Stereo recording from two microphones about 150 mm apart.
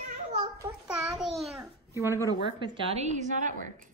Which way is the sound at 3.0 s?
55° right (ahead or behind).